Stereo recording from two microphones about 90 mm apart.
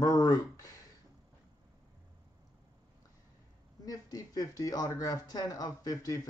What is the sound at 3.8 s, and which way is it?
Speech, 40° left (ahead or behind).